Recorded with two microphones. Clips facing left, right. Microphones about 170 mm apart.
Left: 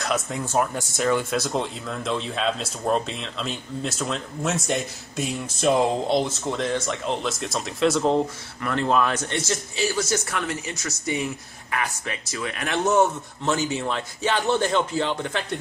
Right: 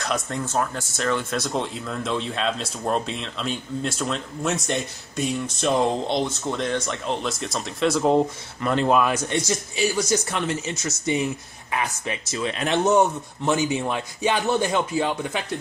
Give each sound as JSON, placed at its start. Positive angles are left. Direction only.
{"t": 0.0, "sound": "speech", "side_deg": 0}
{"t": 0.5, "sound": "speech", "side_deg": 15}
{"t": 8.6, "sound": "a man's voice", "side_deg": -15}